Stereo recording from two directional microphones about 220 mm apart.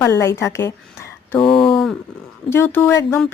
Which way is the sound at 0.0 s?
10° left (ahead or behind).